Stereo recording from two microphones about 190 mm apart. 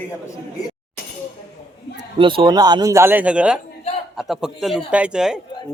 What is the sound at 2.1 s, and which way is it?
A man's voice, 25° right (ahead or behind).